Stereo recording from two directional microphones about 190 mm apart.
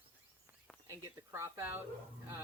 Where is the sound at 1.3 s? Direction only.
15° right (ahead or behind).